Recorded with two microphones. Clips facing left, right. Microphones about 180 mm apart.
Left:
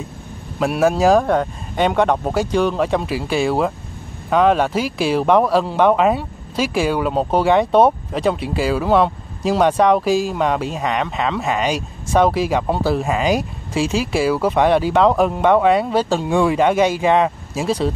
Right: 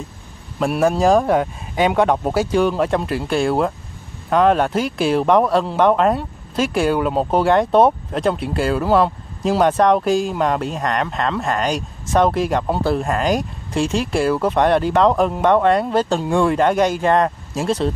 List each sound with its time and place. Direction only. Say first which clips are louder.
0.6 s speech: left 1 dB; centre (ahead or behind)